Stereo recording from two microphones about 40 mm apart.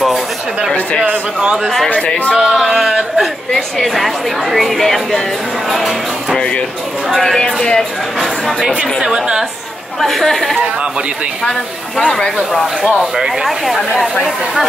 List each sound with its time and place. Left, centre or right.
1.0 s speech: right
2.3 s speech: centre
3.5 s a woman's voice: centre
7.3 s speech: centre
8.2 s a woman's voice: centre
10.0 s a woman's voice: centre
13.0 s speech: centre
14.2 s speech: centre